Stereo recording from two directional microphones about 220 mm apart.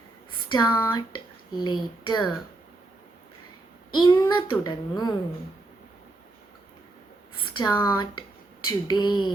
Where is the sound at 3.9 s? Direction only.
20° left (ahead or behind).